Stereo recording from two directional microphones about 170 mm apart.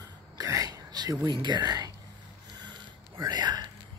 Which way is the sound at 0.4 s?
20° right (ahead or behind).